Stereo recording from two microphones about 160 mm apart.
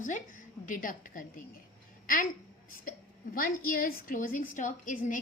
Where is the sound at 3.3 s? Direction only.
60° left (ahead or behind).